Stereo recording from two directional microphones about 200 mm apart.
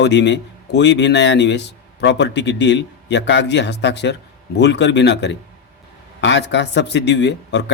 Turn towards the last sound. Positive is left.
turn(degrees=60)  # may be behind; listen again after turning